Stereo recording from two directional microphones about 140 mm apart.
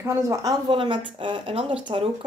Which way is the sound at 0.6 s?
35° right (ahead or behind).